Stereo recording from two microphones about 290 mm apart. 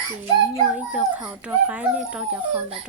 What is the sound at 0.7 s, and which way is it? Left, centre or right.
A child's voice, centre.